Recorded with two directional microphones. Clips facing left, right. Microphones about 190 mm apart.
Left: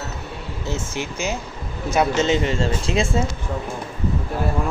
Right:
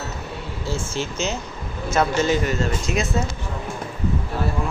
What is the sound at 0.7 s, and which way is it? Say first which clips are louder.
Speech: right 1 dB; 20° left (ahead or behind).